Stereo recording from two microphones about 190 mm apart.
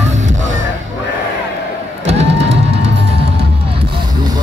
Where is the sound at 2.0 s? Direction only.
35° right (ahead or behind).